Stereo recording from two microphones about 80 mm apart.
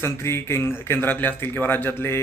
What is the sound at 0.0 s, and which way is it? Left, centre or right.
A man's voice, left.